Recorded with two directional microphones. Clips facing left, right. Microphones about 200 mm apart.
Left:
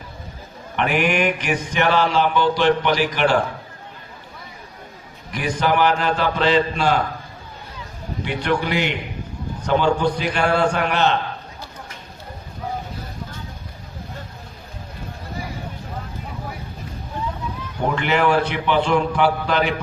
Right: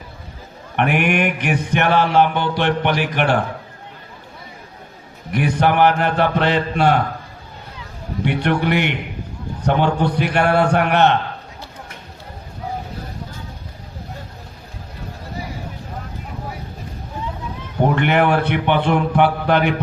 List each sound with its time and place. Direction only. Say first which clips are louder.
0.8 s mantra: right 2 dB; 60° right (ahead or behind)
5.3 s mantra: right 3 dB; 60° right (ahead or behind)
8.2 s mantra: right 3 dB; 60° right (ahead or behind)
17.9 s mantra: even; 55° right (ahead or behind)